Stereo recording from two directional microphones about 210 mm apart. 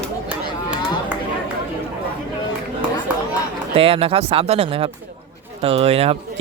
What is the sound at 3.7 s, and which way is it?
Speech, 25° right (ahead or behind).